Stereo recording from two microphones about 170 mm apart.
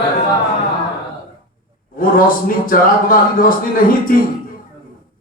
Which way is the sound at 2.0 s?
55° left (ahead or behind).